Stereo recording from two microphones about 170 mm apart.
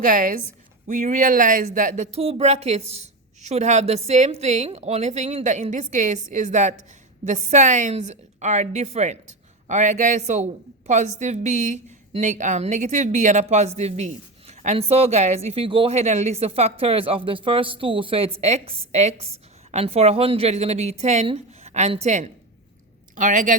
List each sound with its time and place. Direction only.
0.0 s a woman's voice: 50° right (ahead or behind)